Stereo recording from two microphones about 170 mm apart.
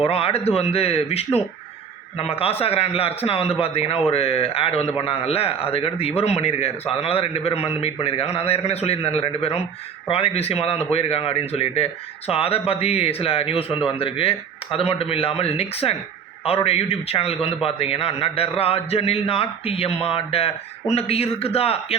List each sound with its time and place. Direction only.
0.0 s a man's voice: 35° left (ahead or behind)